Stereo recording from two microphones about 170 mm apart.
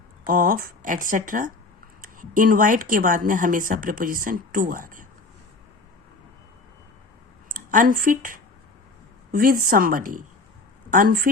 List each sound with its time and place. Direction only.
0.3 s speech: 55° right (ahead or behind)
7.5 s speech: 50° right (ahead or behind)